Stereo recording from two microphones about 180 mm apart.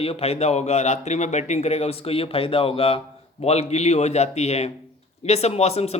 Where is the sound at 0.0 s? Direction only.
35° left (ahead or behind).